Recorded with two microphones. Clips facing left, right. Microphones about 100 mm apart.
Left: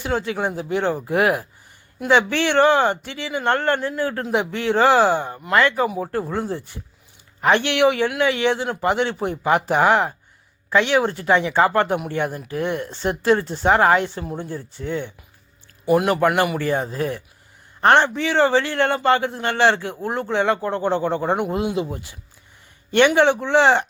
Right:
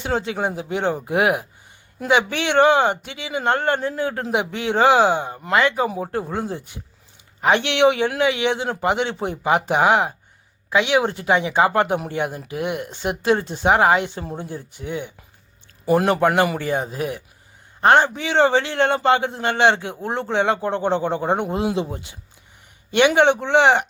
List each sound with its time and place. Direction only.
0.0 s a man's voice: 20° right (ahead or behind)
5.9 s a man's voice: 30° right (ahead or behind)
15.9 s a man's voice: 30° right (ahead or behind)